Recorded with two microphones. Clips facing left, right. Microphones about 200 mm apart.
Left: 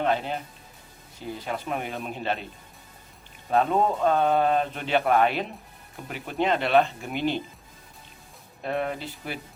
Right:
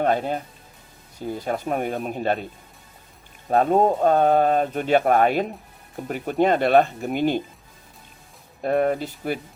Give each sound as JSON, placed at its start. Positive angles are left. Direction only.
{"t": 0.0, "sound": "speech", "side_deg": -45}
{"t": 3.5, "sound": "speech", "side_deg": -45}
{"t": 8.6, "sound": "speech", "side_deg": -45}